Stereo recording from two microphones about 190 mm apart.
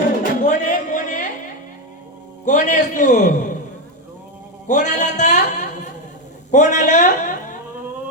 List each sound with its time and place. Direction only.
0.2 s a sound: 40° left (ahead or behind)
2.4 s a man's voice: 40° left (ahead or behind)
4.7 s a man's voice: 40° left (ahead or behind)